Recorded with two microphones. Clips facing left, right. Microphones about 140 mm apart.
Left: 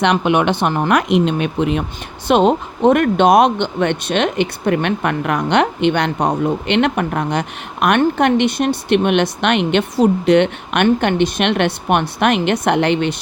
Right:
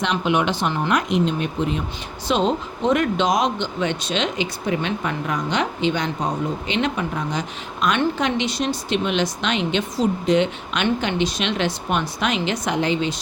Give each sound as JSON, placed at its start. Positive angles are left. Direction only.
{"t": 0.0, "sound": "speech", "side_deg": 65}
{"t": 2.2, "sound": "speech", "side_deg": 60}